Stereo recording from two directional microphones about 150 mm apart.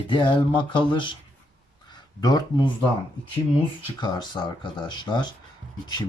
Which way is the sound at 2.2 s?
25° left (ahead or behind).